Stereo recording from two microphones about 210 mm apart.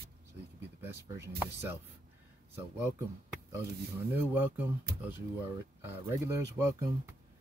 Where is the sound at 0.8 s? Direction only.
10° right (ahead or behind).